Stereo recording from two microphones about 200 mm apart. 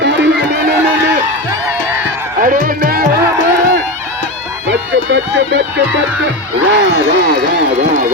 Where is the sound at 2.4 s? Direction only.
40° right (ahead or behind).